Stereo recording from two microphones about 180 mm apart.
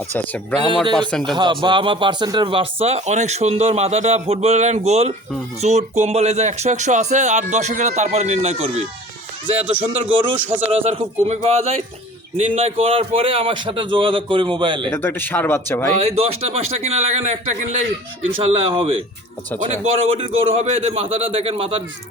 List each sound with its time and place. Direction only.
0.5 s speech: 10° left (ahead or behind)
1.4 s a man's voice: 25° right (ahead or behind)
9.8 s speech: 10° right (ahead or behind)
10.7 s a man's voice: 35° right (ahead or behind)
14.8 s speech: 10° left (ahead or behind)
16.0 s speech: 35° right (ahead or behind)
18.3 s a man's voice: 30° right (ahead or behind)
19.5 s speech: 40° right (ahead or behind)